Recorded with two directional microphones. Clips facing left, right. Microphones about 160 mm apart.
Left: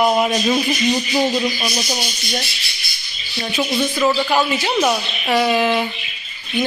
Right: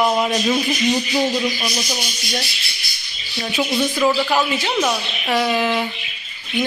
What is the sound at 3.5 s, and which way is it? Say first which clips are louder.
Speech: even; 10° right (ahead or behind).